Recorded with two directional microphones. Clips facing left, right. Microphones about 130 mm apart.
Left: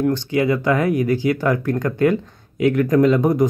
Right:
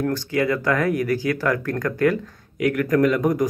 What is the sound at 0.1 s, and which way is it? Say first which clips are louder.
Speech: left 3 dB; 20° left (ahead or behind).